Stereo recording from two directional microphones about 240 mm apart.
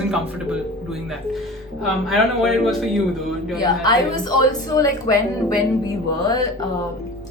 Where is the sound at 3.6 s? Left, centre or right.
Centre.